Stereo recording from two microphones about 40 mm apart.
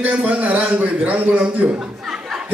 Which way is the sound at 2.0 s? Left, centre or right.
Centre.